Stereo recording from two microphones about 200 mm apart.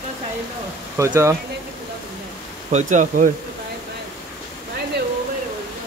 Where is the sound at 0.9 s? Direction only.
15° right (ahead or behind).